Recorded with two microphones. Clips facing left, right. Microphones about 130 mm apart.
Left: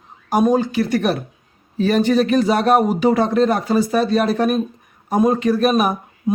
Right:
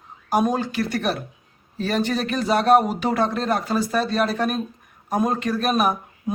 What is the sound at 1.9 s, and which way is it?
Speech, 50° left (ahead or behind).